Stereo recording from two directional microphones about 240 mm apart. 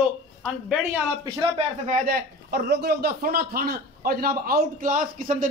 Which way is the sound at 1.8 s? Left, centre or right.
Right.